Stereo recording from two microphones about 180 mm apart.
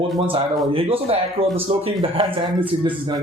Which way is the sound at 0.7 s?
30° right (ahead or behind).